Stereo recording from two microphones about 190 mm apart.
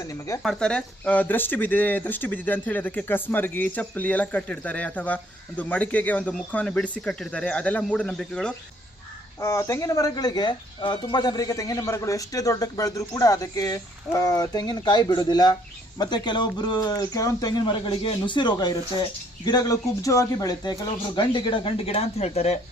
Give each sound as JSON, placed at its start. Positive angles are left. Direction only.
{"t": 0.4, "sound": "speech", "side_deg": 5}
{"t": 9.4, "sound": "speech", "side_deg": 15}